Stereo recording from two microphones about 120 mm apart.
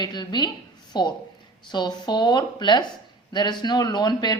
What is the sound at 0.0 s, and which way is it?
Speech, 35° left (ahead or behind).